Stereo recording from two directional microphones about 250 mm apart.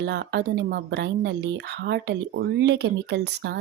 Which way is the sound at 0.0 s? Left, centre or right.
Right.